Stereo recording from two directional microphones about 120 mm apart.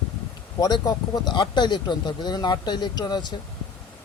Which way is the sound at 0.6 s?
30° left (ahead or behind).